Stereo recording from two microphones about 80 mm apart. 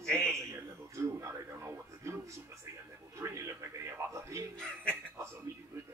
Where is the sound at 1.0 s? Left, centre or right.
Right.